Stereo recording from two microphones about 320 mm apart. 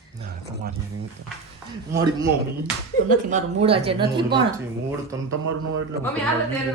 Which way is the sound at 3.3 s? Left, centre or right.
Centre.